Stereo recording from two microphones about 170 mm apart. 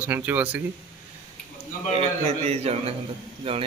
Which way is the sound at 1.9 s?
40° right (ahead or behind).